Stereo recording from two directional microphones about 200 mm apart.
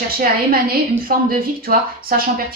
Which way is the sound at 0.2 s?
50° right (ahead or behind).